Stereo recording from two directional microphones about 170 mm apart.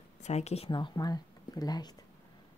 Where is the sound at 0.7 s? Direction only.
25° left (ahead or behind).